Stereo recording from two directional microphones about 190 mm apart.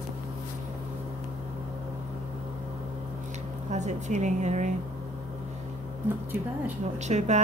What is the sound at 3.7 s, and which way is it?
Speech, 40° right (ahead or behind).